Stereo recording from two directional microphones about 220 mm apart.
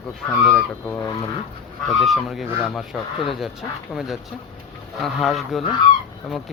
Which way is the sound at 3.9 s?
Centre (ahead or behind).